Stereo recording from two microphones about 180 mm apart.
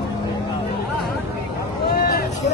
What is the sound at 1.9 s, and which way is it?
Vehicle, 60° left (ahead or behind).